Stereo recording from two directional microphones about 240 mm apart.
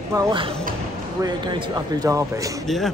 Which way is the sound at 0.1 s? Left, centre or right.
Centre.